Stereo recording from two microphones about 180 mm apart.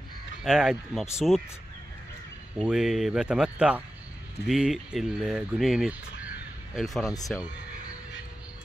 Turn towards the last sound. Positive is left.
turn(degrees=20)  # may be behind; listen again after turning